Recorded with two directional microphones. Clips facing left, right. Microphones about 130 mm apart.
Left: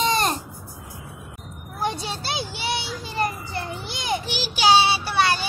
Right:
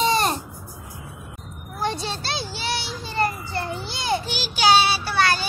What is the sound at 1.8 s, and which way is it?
Children playing, 15° left (ahead or behind).